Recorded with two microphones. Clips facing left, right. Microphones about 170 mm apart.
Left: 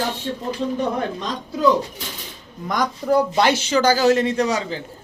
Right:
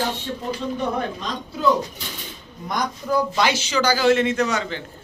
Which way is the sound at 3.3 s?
55° left (ahead or behind).